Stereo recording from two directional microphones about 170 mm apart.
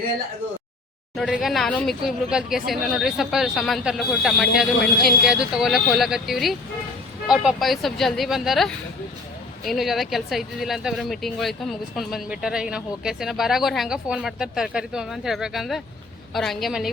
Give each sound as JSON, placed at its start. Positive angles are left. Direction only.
{"t": 1.1, "sound": "speech", "side_deg": 0}